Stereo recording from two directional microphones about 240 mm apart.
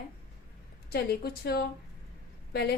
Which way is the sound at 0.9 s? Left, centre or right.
Left.